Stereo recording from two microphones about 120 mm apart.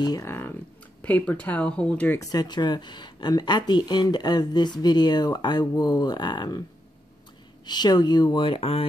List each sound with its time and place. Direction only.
0.0 s speech: 30° left (ahead or behind)
0.3 s speech: 20° left (ahead or behind)
2.1 s speech: 35° left (ahead or behind)
7.6 s speech: 35° left (ahead or behind); by 8.8 s 50° left (ahead or behind)